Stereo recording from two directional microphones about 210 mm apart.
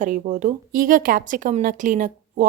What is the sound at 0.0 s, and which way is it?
A woman's voice, 35° right (ahead or behind).